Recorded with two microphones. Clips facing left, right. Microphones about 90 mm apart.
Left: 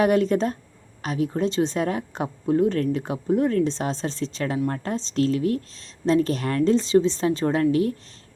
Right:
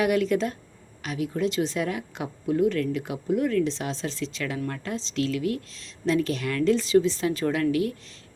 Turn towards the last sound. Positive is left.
turn(degrees=35)  # may be behind; listen again after turning